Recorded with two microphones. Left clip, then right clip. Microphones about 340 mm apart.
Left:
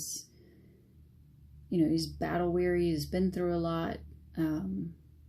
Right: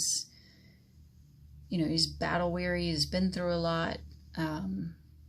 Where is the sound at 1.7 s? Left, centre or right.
Right.